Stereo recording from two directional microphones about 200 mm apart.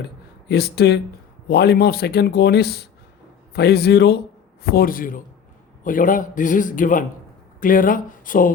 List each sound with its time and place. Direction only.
0.4 s a man's voice: 55° left (ahead or behind)